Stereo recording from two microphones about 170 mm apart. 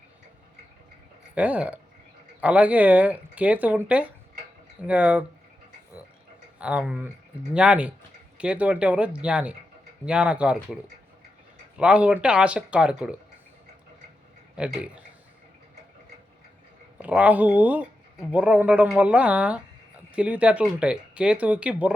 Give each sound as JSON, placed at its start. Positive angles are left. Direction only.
{"t": 1.4, "sound": "speech", "side_deg": -10}
{"t": 6.6, "sound": "speech", "side_deg": -5}
{"t": 11.8, "sound": "speech", "side_deg": -5}
{"t": 14.5, "sound": "a man's voice", "side_deg": -5}
{"t": 17.0, "sound": "speech", "side_deg": -10}